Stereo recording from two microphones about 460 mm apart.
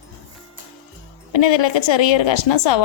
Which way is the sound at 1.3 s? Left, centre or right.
Left.